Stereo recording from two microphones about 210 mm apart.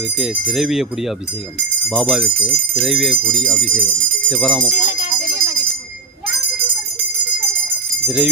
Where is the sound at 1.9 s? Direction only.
Centre (ahead or behind).